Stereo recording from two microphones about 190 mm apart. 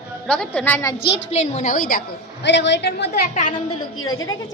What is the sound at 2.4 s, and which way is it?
A woman's voice, 65° left (ahead or behind).